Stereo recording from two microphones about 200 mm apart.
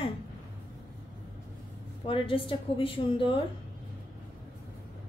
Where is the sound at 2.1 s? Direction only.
25° left (ahead or behind).